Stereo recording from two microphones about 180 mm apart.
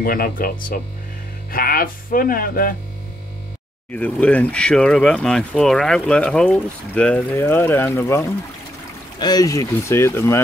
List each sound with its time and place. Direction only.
0.0 s speech: 50° left (ahead or behind)
3.9 s speech: 10° left (ahead or behind)